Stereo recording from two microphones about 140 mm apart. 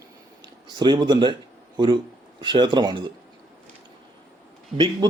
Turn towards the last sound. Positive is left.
turn(degrees=-30)  # may be behind; listen again after turning